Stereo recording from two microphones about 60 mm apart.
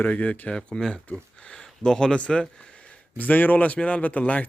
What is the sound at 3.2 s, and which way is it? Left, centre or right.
Speech, left.